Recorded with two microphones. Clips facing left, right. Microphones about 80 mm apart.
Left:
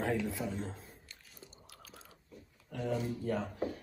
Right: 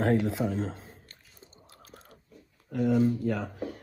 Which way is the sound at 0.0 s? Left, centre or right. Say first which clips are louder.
Right 8 dB; right.